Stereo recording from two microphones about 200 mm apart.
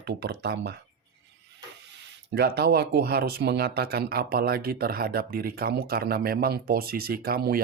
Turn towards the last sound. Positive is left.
turn(degrees=-50)  # may be behind; listen again after turning